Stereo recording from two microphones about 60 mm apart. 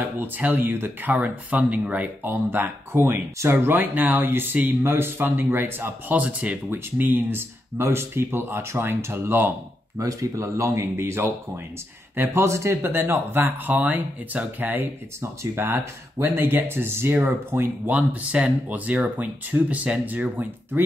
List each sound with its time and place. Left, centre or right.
0.2 s speech: right
2.3 s speech: right
6.1 s speech: right
6.7 s speech: right
9.9 s speech: right
17.9 s speech: right